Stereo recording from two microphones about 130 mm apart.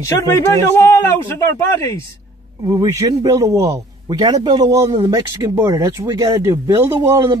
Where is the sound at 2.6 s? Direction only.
30° right (ahead or behind).